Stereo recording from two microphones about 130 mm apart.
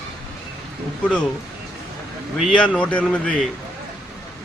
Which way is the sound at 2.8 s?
10° left (ahead or behind).